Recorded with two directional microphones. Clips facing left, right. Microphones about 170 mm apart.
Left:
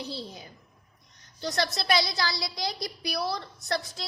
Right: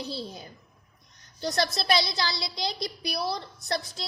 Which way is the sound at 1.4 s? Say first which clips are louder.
Right 2 dB; 35° right (ahead or behind).